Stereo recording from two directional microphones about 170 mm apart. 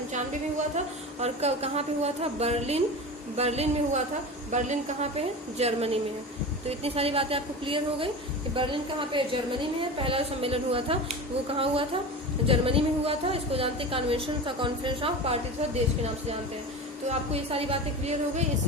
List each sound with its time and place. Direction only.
1.2 s a woman's voice: 40° right (ahead or behind)
17.1 s a woman's voice: 35° right (ahead or behind)